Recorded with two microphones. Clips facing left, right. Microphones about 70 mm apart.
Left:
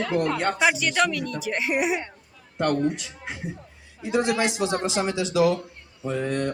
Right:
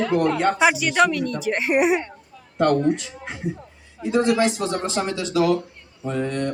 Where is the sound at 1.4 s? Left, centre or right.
Right.